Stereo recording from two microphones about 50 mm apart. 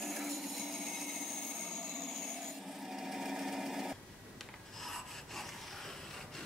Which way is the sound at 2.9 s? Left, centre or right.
Centre.